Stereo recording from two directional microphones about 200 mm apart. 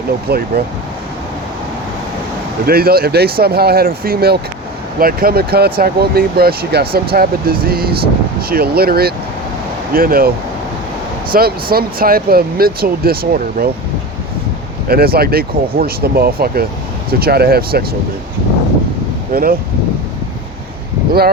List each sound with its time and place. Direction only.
0.3 s speech: 50° right (ahead or behind)
2.6 s speech: 50° right (ahead or behind)
14.8 s speech: 50° right (ahead or behind)
19.3 s speech: 45° right (ahead or behind)
21.1 s speech: 50° right (ahead or behind)